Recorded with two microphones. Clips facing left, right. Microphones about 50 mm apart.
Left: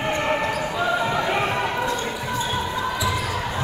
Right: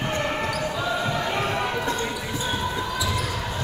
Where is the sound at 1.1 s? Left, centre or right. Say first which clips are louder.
Left 3 dB; centre.